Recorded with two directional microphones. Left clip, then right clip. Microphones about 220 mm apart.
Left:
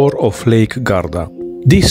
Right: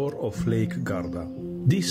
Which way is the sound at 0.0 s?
40° left (ahead or behind).